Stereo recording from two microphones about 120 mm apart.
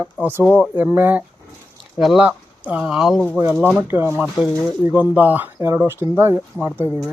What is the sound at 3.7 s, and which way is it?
Speech, 15° right (ahead or behind).